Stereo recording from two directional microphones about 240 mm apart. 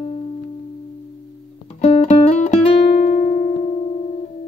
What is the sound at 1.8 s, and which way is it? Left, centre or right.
Music, left.